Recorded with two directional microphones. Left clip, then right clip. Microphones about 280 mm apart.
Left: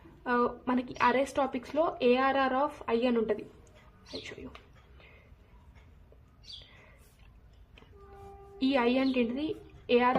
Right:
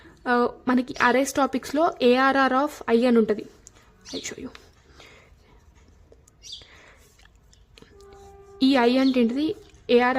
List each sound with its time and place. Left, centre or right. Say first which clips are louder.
0.2 s speech: right 6 dB; right
4.9 s dog: right 9 dB; right
8.5 s a woman's voice: right 8 dB; right